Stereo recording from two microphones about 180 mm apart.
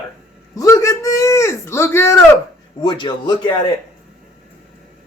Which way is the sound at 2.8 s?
25° left (ahead or behind).